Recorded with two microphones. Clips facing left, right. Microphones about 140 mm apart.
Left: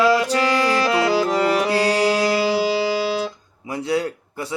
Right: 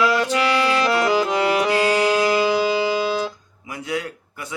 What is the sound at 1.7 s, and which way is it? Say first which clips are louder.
Music: even; 35° left (ahead or behind).